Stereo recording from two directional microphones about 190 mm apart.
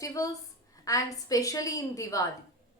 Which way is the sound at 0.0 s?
20° left (ahead or behind).